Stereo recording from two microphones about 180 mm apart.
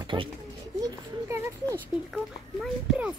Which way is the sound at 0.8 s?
15° right (ahead or behind).